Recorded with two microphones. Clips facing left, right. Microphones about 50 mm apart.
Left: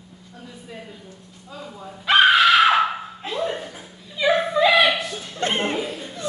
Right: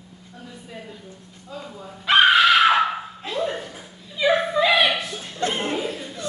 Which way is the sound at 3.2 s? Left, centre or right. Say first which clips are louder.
Even; centre.